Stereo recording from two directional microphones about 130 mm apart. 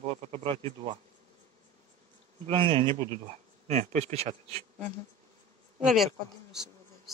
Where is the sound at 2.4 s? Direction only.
45° right (ahead or behind).